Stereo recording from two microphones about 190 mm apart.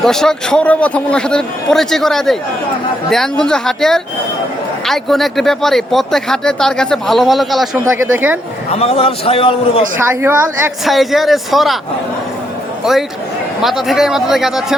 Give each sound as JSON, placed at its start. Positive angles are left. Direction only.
{"t": 0.0, "sound": "a woman's voice", "side_deg": 0}
{"t": 8.8, "sound": "a man's voice", "side_deg": 30}
{"t": 10.0, "sound": "a woman's voice", "side_deg": -10}
{"t": 10.8, "sound": "speech", "side_deg": 0}
{"t": 12.8, "sound": "a man's voice", "side_deg": 0}